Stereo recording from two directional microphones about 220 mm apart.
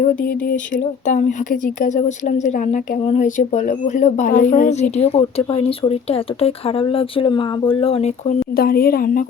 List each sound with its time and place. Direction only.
0.3 s speech: 35° left (ahead or behind)
8.5 s a woman's voice: 45° left (ahead or behind)